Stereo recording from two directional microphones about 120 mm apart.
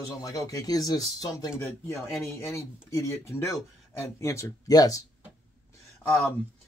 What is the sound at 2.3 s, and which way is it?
Speech, 25° left (ahead or behind).